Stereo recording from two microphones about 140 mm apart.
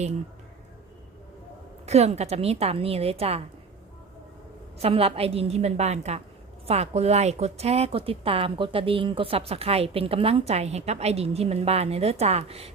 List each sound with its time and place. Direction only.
1.9 s speech: 50° right (ahead or behind)
4.8 s speech: 45° right (ahead or behind)